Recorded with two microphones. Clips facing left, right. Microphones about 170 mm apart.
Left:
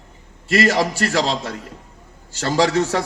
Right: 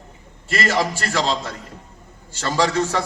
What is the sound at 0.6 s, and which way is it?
A man's voice, 35° left (ahead or behind).